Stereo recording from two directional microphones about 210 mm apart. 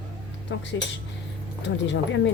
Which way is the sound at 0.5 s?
60° left (ahead or behind).